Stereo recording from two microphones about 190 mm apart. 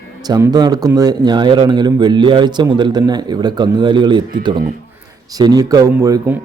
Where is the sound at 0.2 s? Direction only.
20° right (ahead or behind).